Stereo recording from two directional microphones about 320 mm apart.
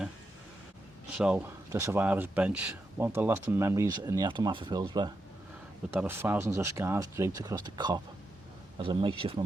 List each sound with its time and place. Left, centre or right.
1.1 s speech: centre